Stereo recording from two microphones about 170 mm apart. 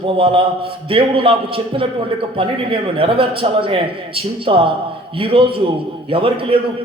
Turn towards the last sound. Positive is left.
turn(degrees=-30)  # may be behind; listen again after turning